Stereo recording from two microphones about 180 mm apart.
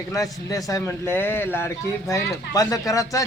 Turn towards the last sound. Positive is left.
turn(degrees=20)  # may be behind; listen again after turning